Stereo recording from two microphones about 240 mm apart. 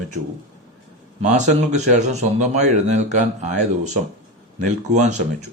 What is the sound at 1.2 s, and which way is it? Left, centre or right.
A man's voice, right.